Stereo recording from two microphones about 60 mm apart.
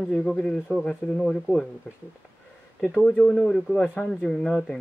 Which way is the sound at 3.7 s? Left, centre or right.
Centre.